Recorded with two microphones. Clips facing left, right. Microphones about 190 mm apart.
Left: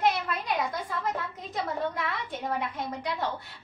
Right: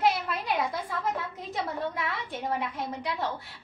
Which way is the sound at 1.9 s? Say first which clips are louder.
Even; centre (ahead or behind).